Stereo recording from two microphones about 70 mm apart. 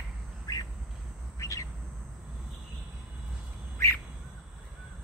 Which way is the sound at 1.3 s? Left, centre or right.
Left.